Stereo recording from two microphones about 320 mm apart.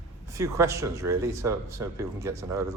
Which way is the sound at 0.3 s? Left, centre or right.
Centre.